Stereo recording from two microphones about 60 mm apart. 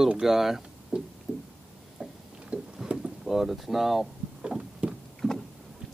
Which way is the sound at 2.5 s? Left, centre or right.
Centre.